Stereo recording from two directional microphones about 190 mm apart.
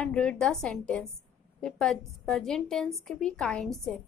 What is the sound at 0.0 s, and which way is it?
A woman's voice, 5° left (ahead or behind).